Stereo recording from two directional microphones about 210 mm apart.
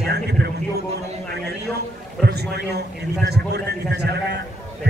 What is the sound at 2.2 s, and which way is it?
A man's voice, 50° right (ahead or behind).